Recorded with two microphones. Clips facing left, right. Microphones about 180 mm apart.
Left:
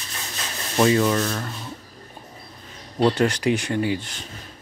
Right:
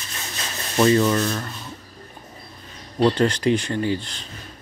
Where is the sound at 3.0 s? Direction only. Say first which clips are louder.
Right 1 dB; 10° left (ahead or behind).